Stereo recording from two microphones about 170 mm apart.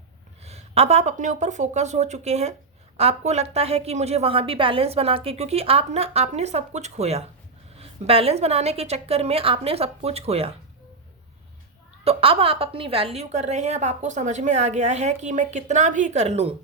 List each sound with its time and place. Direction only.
0.4 s a woman's voice: 40° right (ahead or behind)
12.0 s a woman's voice: 35° right (ahead or behind)